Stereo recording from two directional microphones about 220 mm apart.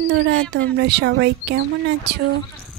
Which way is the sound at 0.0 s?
55° right (ahead or behind).